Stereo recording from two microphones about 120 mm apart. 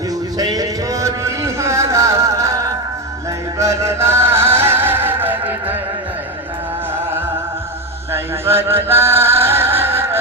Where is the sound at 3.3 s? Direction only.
25° right (ahead or behind).